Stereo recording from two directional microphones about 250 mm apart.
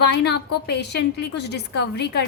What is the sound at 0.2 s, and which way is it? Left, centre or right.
A woman's voice, left.